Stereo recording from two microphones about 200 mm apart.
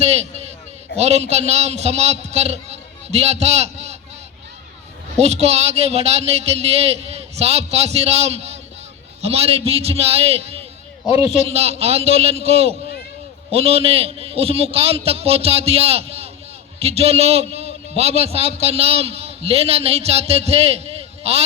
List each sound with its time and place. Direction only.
0.0 s a man's voice: 35° right (ahead or behind)
5.1 s a man's voice: 30° right (ahead or behind)